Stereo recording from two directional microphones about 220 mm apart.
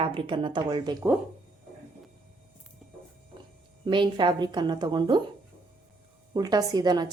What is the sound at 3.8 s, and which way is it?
A woman's voice, 20° right (ahead or behind).